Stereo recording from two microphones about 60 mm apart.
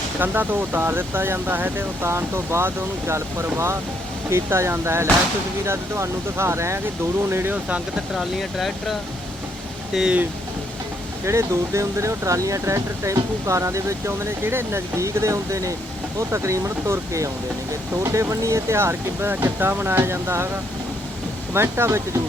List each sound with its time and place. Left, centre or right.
0.2 s speech: right
2.0 s speech: right
8.1 s speech: centre
11.3 s speech: right
21.5 s speech: right